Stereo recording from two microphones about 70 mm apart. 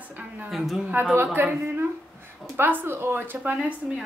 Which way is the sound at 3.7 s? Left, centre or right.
Centre.